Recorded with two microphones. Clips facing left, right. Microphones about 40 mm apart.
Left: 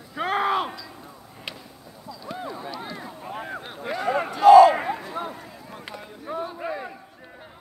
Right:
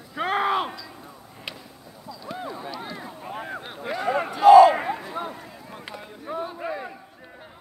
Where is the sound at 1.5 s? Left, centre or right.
Centre.